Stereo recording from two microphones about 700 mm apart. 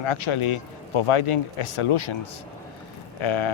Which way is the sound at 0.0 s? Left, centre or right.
Left.